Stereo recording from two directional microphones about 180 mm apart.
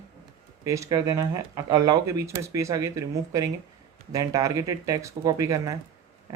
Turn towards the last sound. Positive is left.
turn(degrees=-15)  # may be behind; listen again after turning